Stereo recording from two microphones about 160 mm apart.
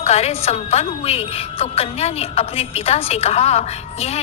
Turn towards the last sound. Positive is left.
turn(degrees=40)  # may be behind; listen again after turning